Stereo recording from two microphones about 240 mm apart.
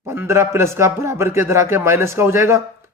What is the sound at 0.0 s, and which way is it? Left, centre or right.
A man's voice, centre.